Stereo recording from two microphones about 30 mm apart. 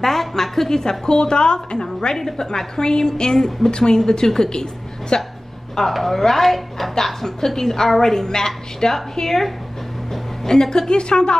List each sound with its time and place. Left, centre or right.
0.0 s a sound: centre
1.1 s a woman's voice: left
3.3 s a woman's voice: centre
5.9 s a woman's voice: centre; by 11.3 s left